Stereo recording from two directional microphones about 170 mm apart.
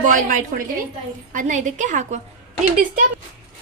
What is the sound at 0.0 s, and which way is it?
A woman's voice, 50° right (ahead or behind).